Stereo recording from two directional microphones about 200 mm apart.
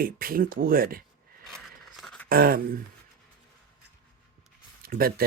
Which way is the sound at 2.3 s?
45° right (ahead or behind).